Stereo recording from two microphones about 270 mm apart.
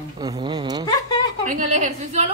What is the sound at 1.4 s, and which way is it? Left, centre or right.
Speech, right.